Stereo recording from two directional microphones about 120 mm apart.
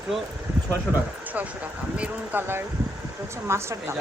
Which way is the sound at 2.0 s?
20° right (ahead or behind).